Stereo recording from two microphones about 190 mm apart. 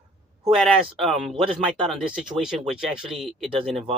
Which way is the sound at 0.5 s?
Centre (ahead or behind).